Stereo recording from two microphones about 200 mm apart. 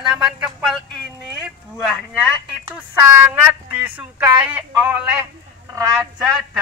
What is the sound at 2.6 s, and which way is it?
A woman's voice, 15° right (ahead or behind).